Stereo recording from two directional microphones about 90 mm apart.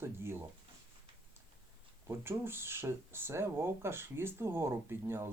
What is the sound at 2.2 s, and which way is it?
Speech, 25° right (ahead or behind).